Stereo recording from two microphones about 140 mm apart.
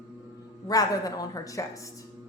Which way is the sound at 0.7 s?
25° left (ahead or behind).